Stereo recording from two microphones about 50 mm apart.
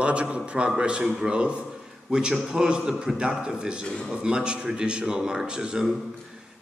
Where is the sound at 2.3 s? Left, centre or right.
Centre.